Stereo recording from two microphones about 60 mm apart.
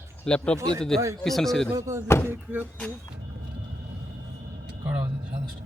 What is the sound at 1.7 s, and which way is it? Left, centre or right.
Speech, right.